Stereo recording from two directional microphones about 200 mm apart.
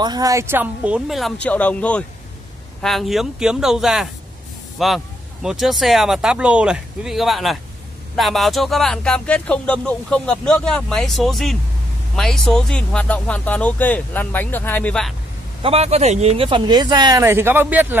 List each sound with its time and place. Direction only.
0.0 s speech: 20° right (ahead or behind); by 15.1 s 5° left (ahead or behind)
15.6 s speech: 30° right (ahead or behind); by 17.9 s 10° right (ahead or behind)